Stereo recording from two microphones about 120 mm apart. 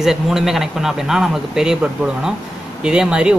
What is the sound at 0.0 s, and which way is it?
Speech, 5° right (ahead or behind).